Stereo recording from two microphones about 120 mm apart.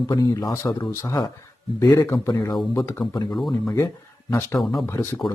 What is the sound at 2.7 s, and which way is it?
Speech, 20° left (ahead or behind).